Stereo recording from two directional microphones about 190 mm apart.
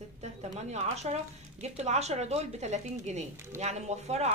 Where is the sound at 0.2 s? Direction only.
35° right (ahead or behind).